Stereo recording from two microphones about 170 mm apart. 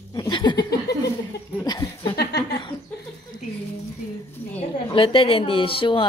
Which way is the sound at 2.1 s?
75° left (ahead or behind).